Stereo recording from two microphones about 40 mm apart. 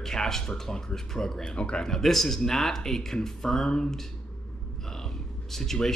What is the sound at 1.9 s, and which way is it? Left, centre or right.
Speech, centre.